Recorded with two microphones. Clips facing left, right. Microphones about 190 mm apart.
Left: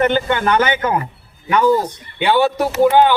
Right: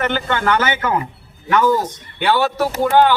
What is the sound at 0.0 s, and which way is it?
Speech, 20° left (ahead or behind).